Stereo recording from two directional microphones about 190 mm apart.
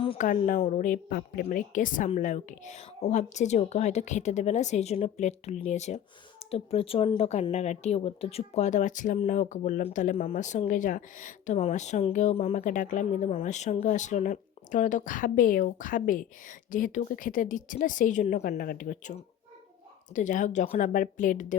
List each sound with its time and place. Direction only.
0.2 s speech: 45° left (ahead or behind)